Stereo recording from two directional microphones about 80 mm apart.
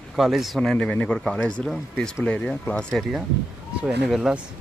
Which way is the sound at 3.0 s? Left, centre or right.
Centre.